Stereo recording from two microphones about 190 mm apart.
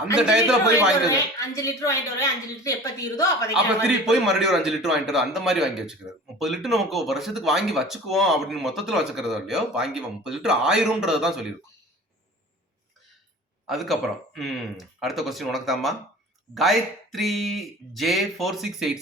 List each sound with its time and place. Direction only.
0.2 s a man's voice: centre (ahead or behind)
0.7 s a woman's voice: 15° left (ahead or behind)
3.8 s a man's voice: centre (ahead or behind)
13.7 s a man's voice: centre (ahead or behind)